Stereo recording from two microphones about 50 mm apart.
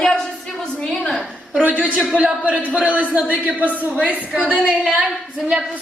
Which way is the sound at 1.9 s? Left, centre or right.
Right.